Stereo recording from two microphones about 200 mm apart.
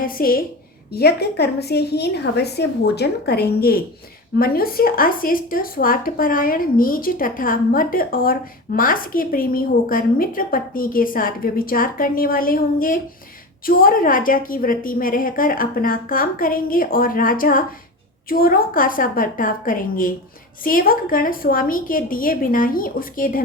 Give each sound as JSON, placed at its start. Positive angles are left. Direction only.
{"t": 0.0, "sound": "speech", "side_deg": 45}